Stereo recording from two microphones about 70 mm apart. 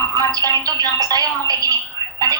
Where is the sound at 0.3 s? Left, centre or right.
Right.